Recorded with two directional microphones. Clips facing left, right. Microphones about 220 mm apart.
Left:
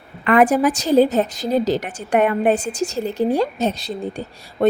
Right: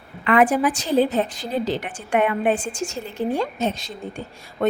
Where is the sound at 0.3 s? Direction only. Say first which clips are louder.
Left 3 dB; 45° left (ahead or behind).